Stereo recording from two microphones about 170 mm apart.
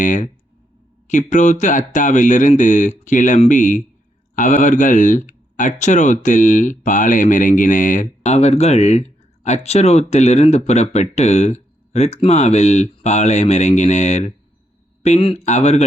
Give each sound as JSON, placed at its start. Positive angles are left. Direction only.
{"t": 0.0, "sound": "speech", "side_deg": 50}